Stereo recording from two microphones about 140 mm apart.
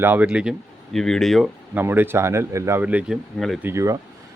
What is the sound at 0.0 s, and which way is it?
Speech, 15° right (ahead or behind).